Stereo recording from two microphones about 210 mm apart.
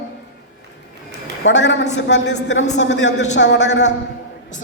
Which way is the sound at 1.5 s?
60° left (ahead or behind).